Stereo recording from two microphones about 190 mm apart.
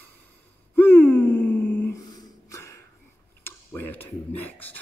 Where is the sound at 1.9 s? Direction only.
20° left (ahead or behind).